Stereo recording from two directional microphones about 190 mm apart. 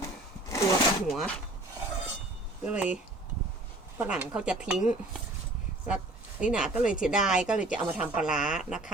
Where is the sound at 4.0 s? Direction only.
5° right (ahead or behind).